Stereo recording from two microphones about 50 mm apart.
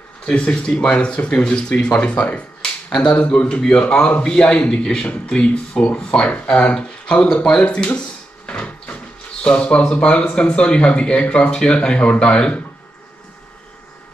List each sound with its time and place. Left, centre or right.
0.2 s a man's voice: left